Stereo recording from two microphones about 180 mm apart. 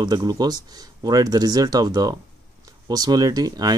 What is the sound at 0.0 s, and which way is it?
Speech, 20° right (ahead or behind).